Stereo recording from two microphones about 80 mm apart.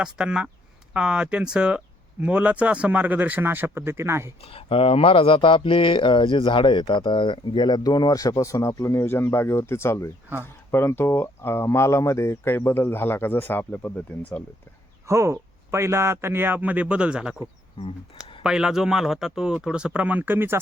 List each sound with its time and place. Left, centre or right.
0.0 s speech: centre; by 4.3 s right
5.1 s speech: left
15.0 s speech: right; by 17.3 s centre
18.4 s speech: centre; by 20.6 s right